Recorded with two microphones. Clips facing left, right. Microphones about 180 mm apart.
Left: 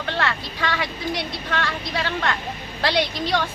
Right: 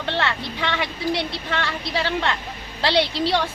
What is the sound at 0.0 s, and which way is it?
Vehicle, 20° right (ahead or behind).